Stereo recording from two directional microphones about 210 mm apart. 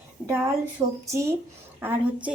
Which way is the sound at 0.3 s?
10° right (ahead or behind).